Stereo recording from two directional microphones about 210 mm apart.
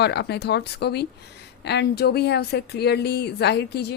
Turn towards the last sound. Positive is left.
turn(degrees=55)  # may be behind; listen again after turning